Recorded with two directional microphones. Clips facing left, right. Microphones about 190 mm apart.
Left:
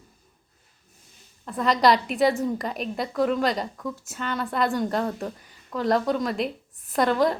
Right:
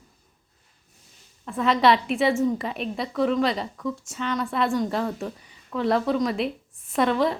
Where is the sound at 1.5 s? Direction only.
Centre (ahead or behind).